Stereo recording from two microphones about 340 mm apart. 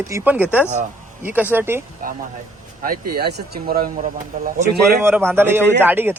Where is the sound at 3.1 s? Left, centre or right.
Right.